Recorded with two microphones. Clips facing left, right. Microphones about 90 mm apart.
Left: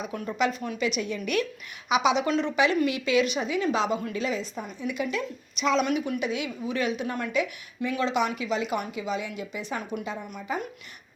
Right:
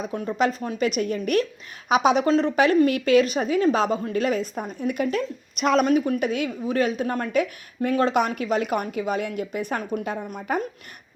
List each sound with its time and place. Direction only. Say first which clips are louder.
0.0 s a woman's voice: right 4 dB; 35° right (ahead or behind)
4.2 s a woman's voice: right 6 dB; 55° right (ahead or behind)